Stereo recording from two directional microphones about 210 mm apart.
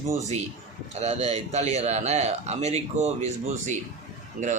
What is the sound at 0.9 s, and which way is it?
A man's voice, 30° right (ahead or behind).